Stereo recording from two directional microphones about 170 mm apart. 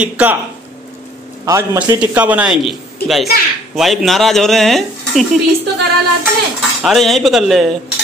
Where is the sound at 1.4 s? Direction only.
20° right (ahead or behind); by 5.4 s centre (ahead or behind).